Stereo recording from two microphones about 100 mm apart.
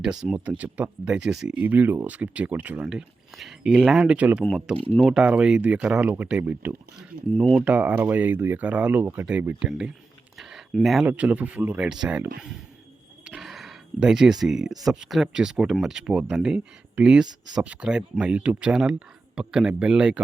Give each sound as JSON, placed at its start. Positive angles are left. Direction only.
{"t": 0.0, "sound": "speech", "side_deg": -5}
{"t": 0.3, "sound": "speech", "side_deg": -15}
{"t": 2.9, "sound": "speech", "side_deg": -5}
{"t": 9.6, "sound": "speech", "side_deg": -10}
{"t": 10.3, "sound": "a sound", "side_deg": -5}
{"t": 11.1, "sound": "speech", "side_deg": -15}
{"t": 13.2, "sound": "a sound", "side_deg": -5}
{"t": 14.4, "sound": "speech", "side_deg": -5}
{"t": 17.2, "sound": "speech", "side_deg": -45}
{"t": 17.6, "sound": "speech", "side_deg": -10}